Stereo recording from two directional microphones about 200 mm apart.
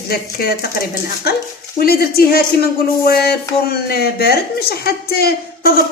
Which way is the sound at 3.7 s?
50° left (ahead or behind).